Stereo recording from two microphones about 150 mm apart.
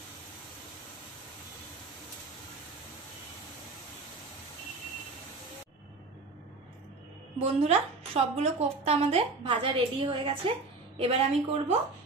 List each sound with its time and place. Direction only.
7.3 s a woman's voice: 40° right (ahead or behind)